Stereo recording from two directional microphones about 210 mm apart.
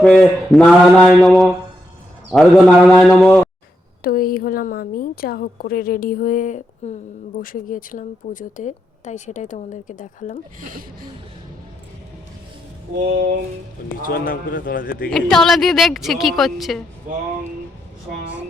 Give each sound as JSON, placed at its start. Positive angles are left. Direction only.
{"t": 0.0, "sound": "a woman's voice", "side_deg": 5}
{"t": 4.0, "sound": "a woman's voice", "side_deg": 45}
{"t": 10.6, "sound": "speech", "side_deg": -40}
{"t": 14.0, "sound": "a woman's voice", "side_deg": 40}
{"t": 15.1, "sound": "a woman's voice", "side_deg": 0}